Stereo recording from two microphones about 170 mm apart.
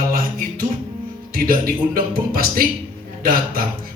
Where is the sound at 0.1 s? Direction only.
55° right (ahead or behind).